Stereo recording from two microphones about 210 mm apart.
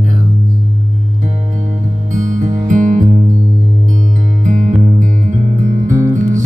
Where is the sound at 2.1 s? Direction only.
35° right (ahead or behind).